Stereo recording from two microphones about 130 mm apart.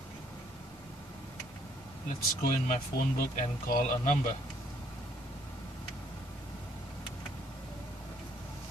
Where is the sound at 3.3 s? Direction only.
85° left.